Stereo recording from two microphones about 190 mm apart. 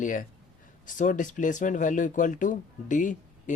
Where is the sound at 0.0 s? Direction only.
45° left (ahead or behind).